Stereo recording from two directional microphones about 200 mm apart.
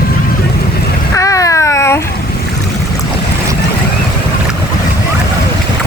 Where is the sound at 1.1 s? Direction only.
15° left (ahead or behind).